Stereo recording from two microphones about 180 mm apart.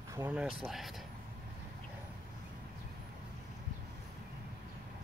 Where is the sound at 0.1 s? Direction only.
10° right (ahead or behind).